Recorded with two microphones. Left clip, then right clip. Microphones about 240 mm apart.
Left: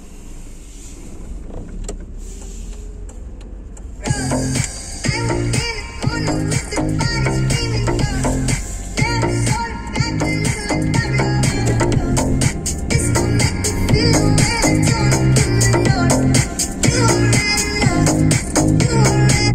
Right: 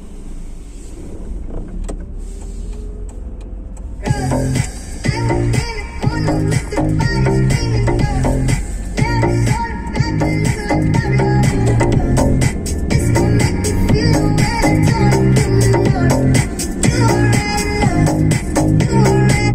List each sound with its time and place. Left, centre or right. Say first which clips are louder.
4.0 s music: right 2 dB; left